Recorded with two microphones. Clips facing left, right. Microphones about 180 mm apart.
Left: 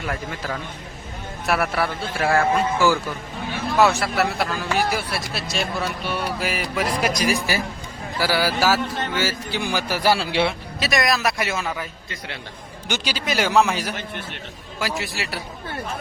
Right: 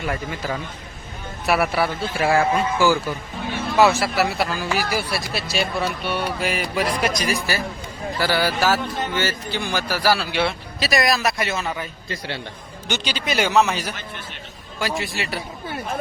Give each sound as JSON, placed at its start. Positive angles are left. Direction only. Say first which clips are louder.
{"t": 0.0, "sound": "speech", "louder": "right 2 dB", "side_deg": -5}
{"t": 10.8, "sound": "speech", "louder": "right 1 dB", "side_deg": 0}
{"t": 12.0, "sound": "a man's voice", "louder": "right 5 dB", "side_deg": -30}
{"t": 12.9, "sound": "speech", "louder": "even", "side_deg": 10}